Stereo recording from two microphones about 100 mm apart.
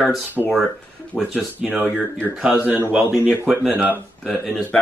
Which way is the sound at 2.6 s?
20° right (ahead or behind).